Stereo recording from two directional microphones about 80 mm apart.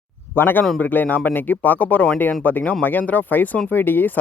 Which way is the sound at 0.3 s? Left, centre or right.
Left.